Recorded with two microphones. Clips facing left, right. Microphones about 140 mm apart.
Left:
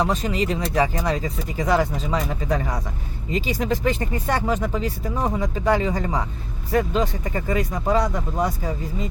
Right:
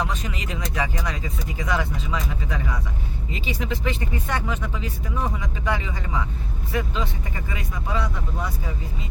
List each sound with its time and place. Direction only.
0.0 s speech: 35° left (ahead or behind)